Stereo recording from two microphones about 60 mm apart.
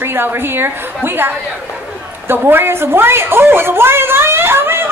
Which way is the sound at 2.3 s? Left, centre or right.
Right.